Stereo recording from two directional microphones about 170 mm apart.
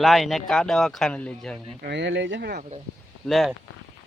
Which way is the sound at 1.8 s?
90° right.